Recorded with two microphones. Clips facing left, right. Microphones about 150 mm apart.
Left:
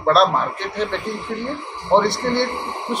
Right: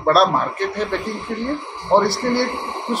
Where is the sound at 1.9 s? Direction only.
5° right (ahead or behind).